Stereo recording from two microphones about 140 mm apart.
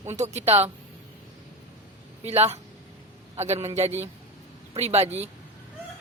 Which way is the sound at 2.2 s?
50° right (ahead or behind).